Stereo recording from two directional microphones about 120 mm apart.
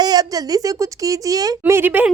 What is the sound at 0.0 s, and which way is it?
Speech, 35° right (ahead or behind).